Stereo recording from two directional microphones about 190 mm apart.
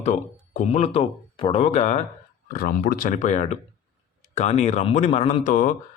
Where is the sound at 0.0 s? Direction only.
40° left (ahead or behind).